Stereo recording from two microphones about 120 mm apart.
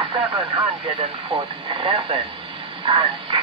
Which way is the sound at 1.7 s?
50° right (ahead or behind).